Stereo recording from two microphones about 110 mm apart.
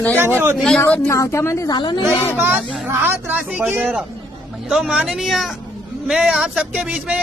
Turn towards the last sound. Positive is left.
turn(degrees=-10)  # may be behind; listen again after turning